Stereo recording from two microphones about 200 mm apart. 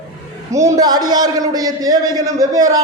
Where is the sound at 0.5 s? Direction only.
15° right (ahead or behind).